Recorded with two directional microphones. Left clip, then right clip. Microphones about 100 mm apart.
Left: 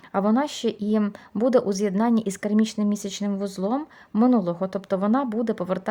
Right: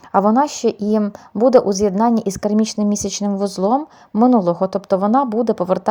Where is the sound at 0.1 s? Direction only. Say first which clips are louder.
Right 9 dB; 25° right (ahead or behind).